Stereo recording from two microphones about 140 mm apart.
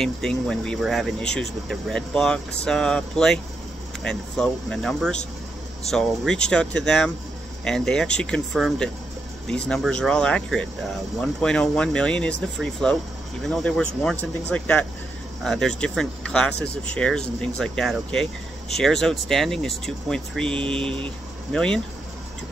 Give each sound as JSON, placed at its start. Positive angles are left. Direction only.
{"t": 0.0, "sound": "speech", "side_deg": 5}
{"t": 20.6, "sound": "a sound", "side_deg": -40}
{"t": 21.5, "sound": "speech", "side_deg": 5}